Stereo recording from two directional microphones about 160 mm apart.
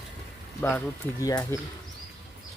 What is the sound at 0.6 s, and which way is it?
Speech, 15° left (ahead or behind).